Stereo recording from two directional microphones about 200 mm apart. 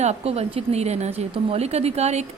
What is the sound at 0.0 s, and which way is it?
Speech, 30° right (ahead or behind).